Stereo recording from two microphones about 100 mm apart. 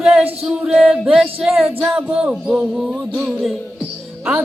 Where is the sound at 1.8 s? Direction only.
Centre (ahead or behind).